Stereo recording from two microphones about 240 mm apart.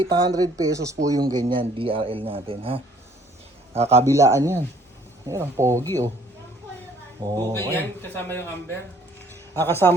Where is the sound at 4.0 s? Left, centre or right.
Centre.